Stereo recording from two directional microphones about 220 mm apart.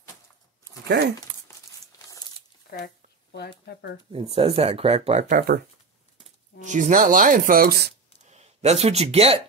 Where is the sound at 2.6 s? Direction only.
50° left (ahead or behind).